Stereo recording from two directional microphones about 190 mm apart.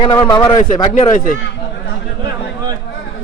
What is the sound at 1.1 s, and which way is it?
Speech, 45° left (ahead or behind).